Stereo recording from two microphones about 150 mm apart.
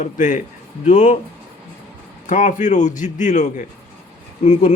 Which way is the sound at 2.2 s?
55° left (ahead or behind).